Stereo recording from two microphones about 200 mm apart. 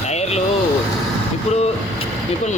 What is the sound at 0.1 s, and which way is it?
Vehicle, 35° left (ahead or behind).